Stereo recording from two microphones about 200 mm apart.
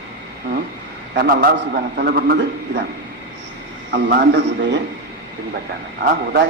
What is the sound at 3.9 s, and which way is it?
Speech, 55° right (ahead or behind).